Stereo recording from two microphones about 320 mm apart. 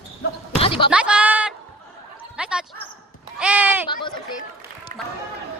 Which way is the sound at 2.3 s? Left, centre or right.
Centre.